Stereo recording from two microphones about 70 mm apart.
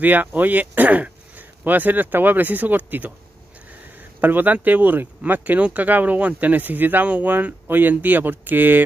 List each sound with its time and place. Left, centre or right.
0.0 s speech: right
4.2 s speech: right